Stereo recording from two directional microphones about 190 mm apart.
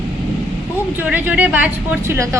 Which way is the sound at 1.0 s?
10° right (ahead or behind).